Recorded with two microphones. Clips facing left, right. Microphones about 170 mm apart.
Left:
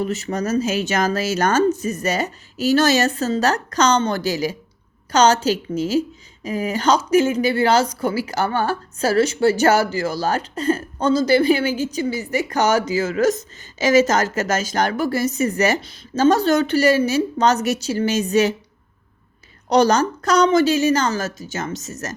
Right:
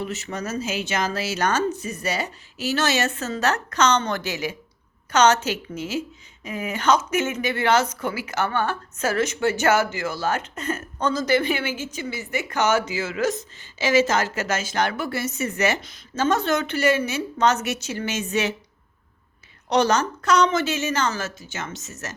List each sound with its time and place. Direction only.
0.0 s a woman's voice: 40° left (ahead or behind)
19.6 s a woman's voice: 35° left (ahead or behind)